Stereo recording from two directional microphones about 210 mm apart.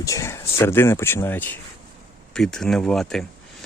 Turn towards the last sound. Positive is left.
turn(degrees=0)  # may be behind; listen again after turning